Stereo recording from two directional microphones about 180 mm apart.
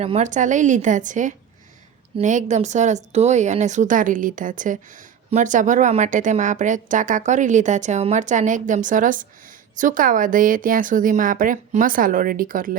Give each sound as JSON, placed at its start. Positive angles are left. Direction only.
{"t": 0.0, "sound": "speech", "side_deg": -40}